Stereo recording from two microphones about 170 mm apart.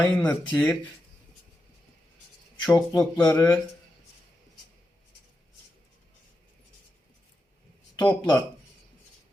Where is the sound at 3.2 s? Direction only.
20° left (ahead or behind).